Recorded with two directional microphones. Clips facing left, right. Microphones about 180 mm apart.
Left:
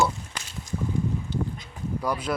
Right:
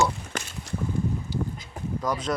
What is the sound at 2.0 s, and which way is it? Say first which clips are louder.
Speech: even; 10° left (ahead or behind).